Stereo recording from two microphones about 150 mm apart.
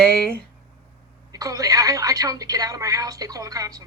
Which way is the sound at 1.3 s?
25° right (ahead or behind).